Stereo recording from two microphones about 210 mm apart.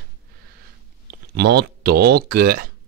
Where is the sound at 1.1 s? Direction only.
50° right (ahead or behind).